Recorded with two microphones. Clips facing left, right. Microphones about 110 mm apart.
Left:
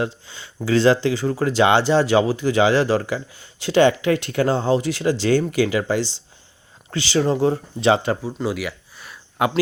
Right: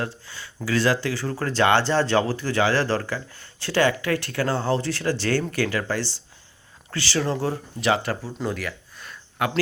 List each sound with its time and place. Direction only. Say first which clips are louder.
0.3 s speech: left 5 dB; 20° left (ahead or behind)
8.4 s a sound: left 4 dB; 10° left (ahead or behind)
9.4 s speech: left 5 dB; 20° left (ahead or behind)